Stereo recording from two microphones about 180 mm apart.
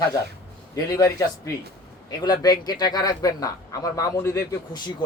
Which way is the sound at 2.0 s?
20° left (ahead or behind).